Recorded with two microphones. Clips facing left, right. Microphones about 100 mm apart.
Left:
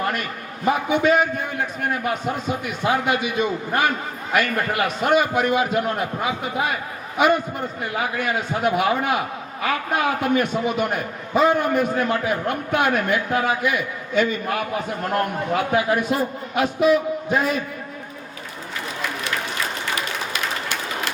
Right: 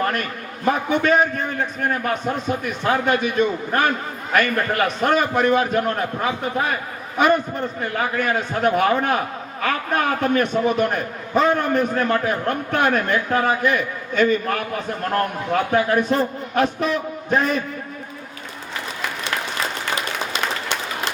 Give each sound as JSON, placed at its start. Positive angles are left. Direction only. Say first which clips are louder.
{"t": 0.6, "sound": "a man's voice", "louder": "even", "side_deg": 5}
{"t": 3.1, "sound": "a man's voice", "louder": "right 2 dB", "side_deg": -45}
{"t": 3.3, "sound": "a man's voice", "louder": "right 2 dB", "side_deg": 5}
{"t": 7.8, "sound": "a man's voice", "louder": "right 2 dB", "side_deg": 10}
{"t": 15.1, "sound": "a man's voice", "louder": "right 1 dB", "side_deg": 10}
{"t": 20.3, "sound": "a sound", "louder": "right 2 dB", "side_deg": -25}